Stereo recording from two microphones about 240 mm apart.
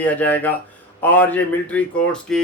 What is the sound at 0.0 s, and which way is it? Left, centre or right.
Speech, centre.